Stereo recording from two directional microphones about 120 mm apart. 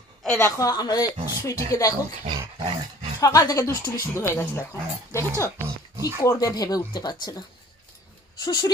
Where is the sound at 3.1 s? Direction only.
30° left (ahead or behind).